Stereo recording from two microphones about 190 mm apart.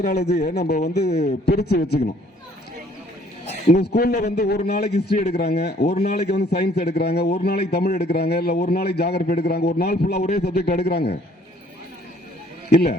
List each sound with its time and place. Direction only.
0.4 s a man's voice: 55° left (ahead or behind)
3.7 s a man's voice: 55° left (ahead or behind)
12.7 s a man's voice: 55° left (ahead or behind)